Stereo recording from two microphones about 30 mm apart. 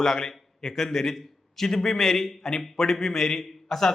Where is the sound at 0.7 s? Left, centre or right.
Centre.